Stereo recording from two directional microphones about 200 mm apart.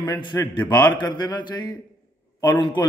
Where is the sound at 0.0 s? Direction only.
25° left (ahead or behind).